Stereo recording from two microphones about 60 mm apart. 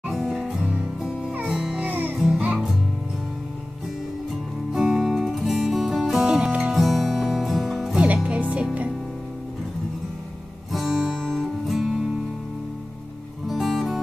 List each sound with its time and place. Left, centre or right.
0.1 s music: centre
1.8 s music: right
2.1 s music: centre
4.7 s music: centre
8.0 s music: centre
10.7 s guitar: centre
11.0 s music: centre
11.2 s music: centre
11.7 s music: centre
13.5 s music: centre